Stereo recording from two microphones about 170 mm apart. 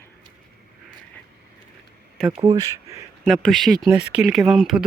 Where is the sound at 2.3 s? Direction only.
25° right (ahead or behind).